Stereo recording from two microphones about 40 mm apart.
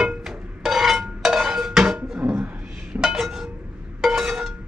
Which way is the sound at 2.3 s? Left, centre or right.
Right.